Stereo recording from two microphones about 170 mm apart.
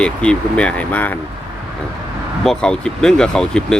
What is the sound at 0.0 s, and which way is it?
Speech, 5° left (ahead or behind).